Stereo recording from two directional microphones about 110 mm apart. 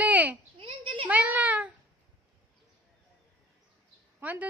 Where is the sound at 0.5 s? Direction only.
55° right (ahead or behind).